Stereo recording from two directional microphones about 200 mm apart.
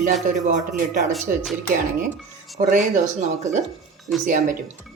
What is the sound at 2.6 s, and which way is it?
Speech, 40° right (ahead or behind).